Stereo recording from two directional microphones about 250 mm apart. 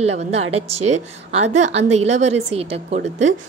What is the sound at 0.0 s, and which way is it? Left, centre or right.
A woman's voice, right.